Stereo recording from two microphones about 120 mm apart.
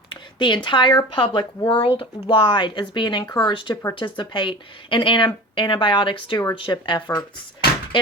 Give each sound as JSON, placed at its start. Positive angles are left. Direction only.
{"t": 0.1, "sound": "speech", "side_deg": 40}